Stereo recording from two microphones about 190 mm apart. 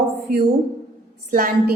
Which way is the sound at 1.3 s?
50° right (ahead or behind).